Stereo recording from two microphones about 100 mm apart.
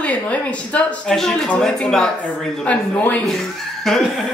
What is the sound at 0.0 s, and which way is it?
Speech, 15° left (ahead or behind).